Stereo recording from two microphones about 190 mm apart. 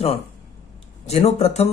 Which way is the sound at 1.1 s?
35° left (ahead or behind).